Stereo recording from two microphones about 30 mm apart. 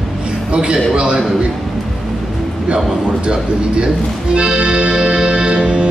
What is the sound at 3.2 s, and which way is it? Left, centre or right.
Speech, right.